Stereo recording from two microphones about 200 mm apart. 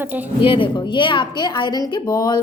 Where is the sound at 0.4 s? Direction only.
25° left (ahead or behind).